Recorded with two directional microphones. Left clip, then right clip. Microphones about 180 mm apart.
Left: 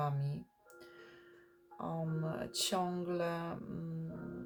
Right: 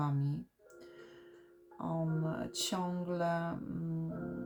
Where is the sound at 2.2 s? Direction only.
50° left (ahead or behind).